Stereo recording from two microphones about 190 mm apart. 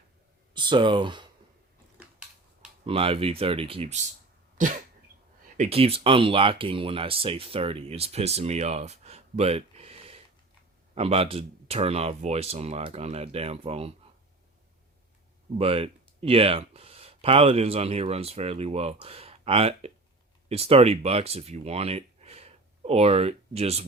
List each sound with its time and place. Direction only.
0.5 s speech: 25° right (ahead or behind)
2.8 s speech: 30° right (ahead or behind)
4.5 s cough: 40° right (ahead or behind)
5.5 s speech: 30° right (ahead or behind)
15.5 s speech: 30° right (ahead or behind)